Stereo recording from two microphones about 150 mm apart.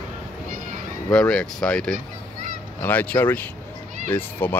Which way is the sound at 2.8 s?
10° left (ahead or behind).